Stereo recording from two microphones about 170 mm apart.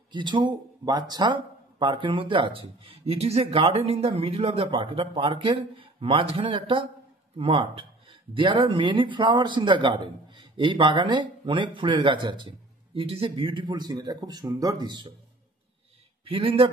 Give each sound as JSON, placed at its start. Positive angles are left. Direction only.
{"t": 0.1, "sound": "speech", "side_deg": -25}
{"t": 16.3, "sound": "speech", "side_deg": -35}